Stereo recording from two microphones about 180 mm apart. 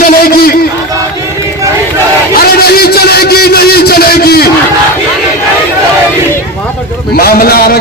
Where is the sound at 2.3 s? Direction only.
60° left (ahead or behind).